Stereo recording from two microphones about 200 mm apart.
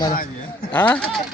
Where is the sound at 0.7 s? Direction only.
10° left (ahead or behind).